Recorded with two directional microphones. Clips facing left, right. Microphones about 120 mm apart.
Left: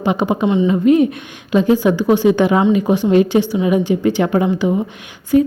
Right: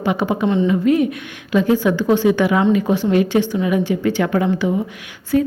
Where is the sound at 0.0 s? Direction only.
15° left (ahead or behind).